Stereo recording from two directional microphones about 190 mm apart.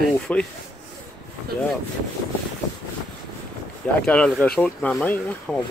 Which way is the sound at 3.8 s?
5° left (ahead or behind).